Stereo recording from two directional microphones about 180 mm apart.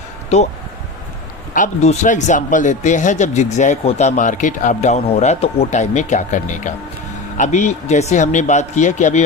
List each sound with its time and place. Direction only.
1.5 s speech: 40° left (ahead or behind)